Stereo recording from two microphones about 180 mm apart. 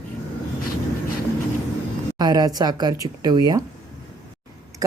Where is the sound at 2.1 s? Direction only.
20° right (ahead or behind).